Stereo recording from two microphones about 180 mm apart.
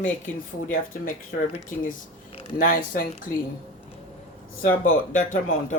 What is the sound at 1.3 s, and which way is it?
Speech, 65° left (ahead or behind).